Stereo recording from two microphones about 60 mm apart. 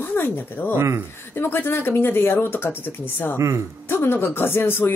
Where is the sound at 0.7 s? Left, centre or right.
Right.